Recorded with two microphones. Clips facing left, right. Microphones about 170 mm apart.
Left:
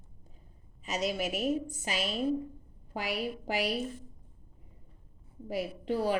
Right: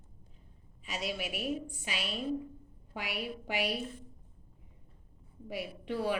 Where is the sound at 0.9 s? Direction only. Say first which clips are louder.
Left 5 dB; 40° left (ahead or behind).